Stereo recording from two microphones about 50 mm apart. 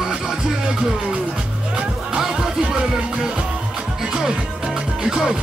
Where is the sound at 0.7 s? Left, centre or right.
Centre.